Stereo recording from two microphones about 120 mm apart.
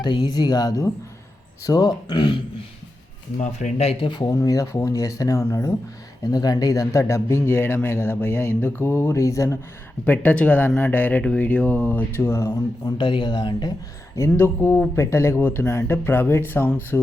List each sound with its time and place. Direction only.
0.0 s speech: 40° left (ahead or behind)
3.3 s speech: 90° left; by 4.1 s 60° left (ahead or behind)
4.1 s speech: 30° left (ahead or behind)
10.1 s a sound: 15° left (ahead or behind)
13.0 s speech: 40° left (ahead or behind)
14.2 s speech: 20° left (ahead or behind)